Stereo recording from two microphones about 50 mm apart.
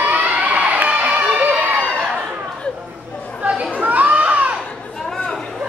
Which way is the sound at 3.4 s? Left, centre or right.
Right.